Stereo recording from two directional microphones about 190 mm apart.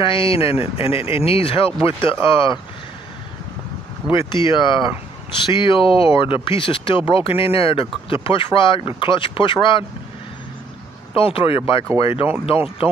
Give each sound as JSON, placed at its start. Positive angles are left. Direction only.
{"t": 0.0, "sound": "speech", "side_deg": 30}
{"t": 4.1, "sound": "speech", "side_deg": 25}
{"t": 11.1, "sound": "speech", "side_deg": 30}